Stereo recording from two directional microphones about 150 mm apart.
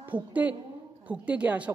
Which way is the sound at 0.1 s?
10° right (ahead or behind).